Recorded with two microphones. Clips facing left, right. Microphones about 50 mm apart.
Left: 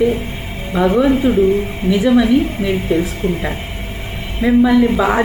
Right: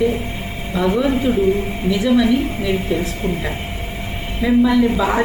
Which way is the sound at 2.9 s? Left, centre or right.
Left.